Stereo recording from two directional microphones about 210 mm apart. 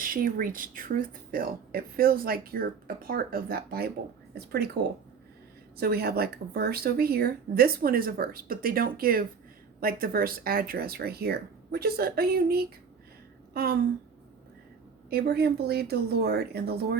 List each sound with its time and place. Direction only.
0.0 s speech: 40° right (ahead or behind)
13.5 s a sound: 50° right (ahead or behind)
15.1 s speech: 50° right (ahead or behind)